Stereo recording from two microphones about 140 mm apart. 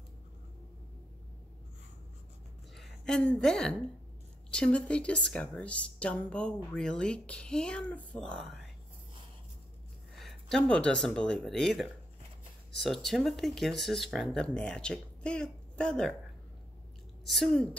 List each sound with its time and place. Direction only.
2.7 s a woman's voice: 5° left (ahead or behind)
10.1 s speech: centre (ahead or behind)
17.3 s speech: centre (ahead or behind)